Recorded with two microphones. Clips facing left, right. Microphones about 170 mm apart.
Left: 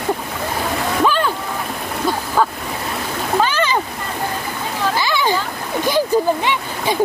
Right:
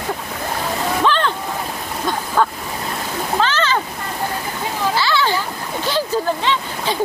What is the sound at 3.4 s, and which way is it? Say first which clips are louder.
Splash: even; 15° left (ahead or behind).